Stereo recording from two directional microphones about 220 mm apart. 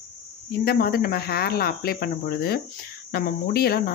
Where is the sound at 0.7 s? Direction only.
45° left (ahead or behind).